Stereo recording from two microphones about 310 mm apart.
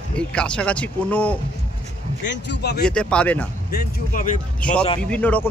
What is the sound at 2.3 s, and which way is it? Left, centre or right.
Speech, left.